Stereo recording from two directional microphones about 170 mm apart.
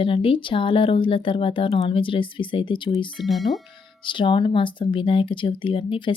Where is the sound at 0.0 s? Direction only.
30° left (ahead or behind).